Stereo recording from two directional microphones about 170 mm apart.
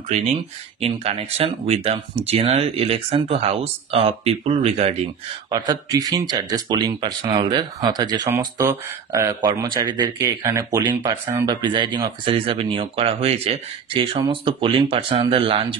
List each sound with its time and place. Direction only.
0.1 s speech: 35° right (ahead or behind)
5.5 s speech: 25° right (ahead or behind)